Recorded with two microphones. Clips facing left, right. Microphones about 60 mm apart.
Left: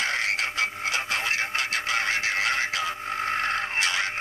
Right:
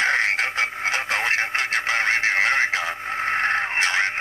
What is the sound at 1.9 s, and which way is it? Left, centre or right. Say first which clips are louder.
Music: right 6 dB; right.